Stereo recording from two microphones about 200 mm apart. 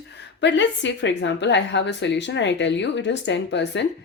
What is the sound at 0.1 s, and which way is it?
A woman's voice, 60° left (ahead or behind).